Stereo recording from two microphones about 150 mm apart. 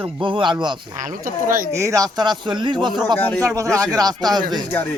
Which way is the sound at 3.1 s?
15° left (ahead or behind).